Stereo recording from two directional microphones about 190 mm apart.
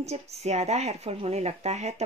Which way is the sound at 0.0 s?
35° right (ahead or behind).